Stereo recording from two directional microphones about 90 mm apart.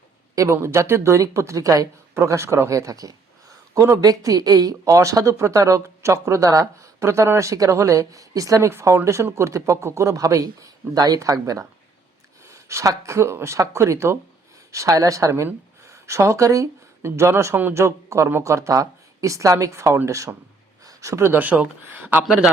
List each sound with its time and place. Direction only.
0.3 s speech: 30° right (ahead or behind)
15.8 s a sound: 35° right (ahead or behind)
17.1 s speech: 30° right (ahead or behind); by 22.4 s 10° right (ahead or behind)